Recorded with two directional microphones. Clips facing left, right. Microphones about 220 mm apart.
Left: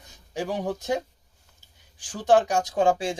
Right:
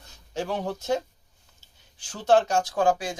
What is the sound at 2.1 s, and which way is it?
Speech, 15° left (ahead or behind).